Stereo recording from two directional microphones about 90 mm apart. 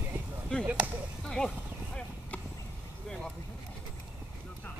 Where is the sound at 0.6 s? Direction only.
10° right (ahead or behind).